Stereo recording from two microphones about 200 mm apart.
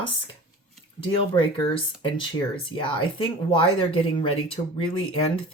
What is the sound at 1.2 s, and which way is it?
Speech, 25° left (ahead or behind).